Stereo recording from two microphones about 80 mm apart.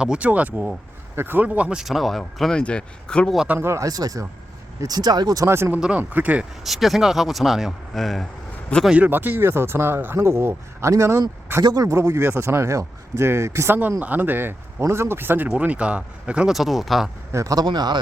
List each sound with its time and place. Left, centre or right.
0.0 s speech: centre
1.5 s speech: centre
1.8 s speech: centre
3.6 s speech: right
3.8 s speech: right
5.5 s speech: right
6.0 s speech: right
6.7 s speech: centre
9.0 s speech: right
11.6 s speech: right
14.0 s speech: right
16.6 s speech: centre
17.3 s speech: right